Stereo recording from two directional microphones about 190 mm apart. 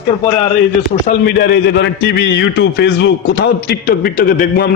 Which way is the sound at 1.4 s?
70° left (ahead or behind).